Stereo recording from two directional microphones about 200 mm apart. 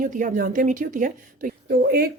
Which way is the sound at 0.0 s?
40° right (ahead or behind).